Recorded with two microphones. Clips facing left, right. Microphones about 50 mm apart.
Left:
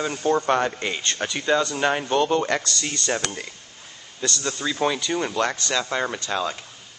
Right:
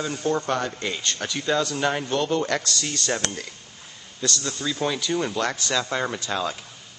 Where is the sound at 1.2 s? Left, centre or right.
Centre.